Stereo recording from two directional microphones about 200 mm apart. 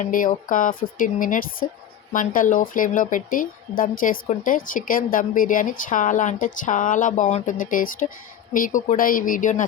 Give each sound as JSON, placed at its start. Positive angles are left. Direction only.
{"t": 0.0, "sound": "a woman's voice", "side_deg": 40}